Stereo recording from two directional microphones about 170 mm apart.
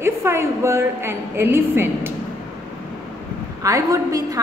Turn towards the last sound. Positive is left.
turn(degrees=-20)  # may be behind; listen again after turning